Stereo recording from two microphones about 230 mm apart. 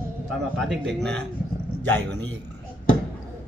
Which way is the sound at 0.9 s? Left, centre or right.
Centre.